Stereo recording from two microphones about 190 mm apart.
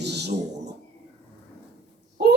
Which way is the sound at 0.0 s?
60° right (ahead or behind).